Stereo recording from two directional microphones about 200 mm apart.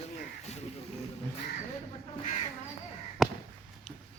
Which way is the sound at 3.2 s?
Centre (ahead or behind).